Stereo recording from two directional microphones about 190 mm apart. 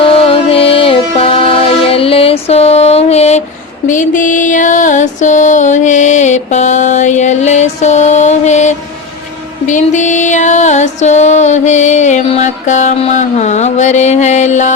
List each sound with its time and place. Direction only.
0.0 s music: 30° left (ahead or behind)